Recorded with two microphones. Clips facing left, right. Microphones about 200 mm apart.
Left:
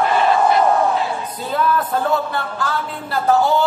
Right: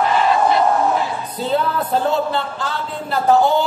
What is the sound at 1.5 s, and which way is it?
A man's voice, 25° right (ahead or behind).